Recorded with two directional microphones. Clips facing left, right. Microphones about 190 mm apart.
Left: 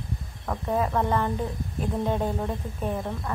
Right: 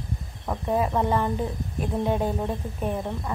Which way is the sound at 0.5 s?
10° right (ahead or behind).